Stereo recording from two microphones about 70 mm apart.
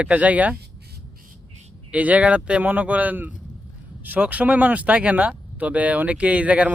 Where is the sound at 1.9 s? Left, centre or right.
Right.